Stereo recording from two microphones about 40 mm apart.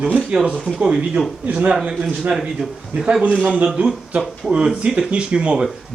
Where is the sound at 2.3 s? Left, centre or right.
Centre.